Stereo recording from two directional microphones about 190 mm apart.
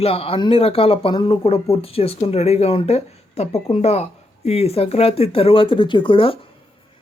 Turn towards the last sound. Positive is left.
turn(degrees=30)  # may be behind; listen again after turning